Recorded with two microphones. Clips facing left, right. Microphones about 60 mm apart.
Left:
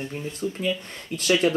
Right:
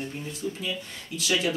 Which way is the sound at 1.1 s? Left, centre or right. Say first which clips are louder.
Left 6 dB; left.